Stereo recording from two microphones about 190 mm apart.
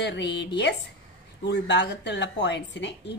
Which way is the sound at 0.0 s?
65° left (ahead or behind).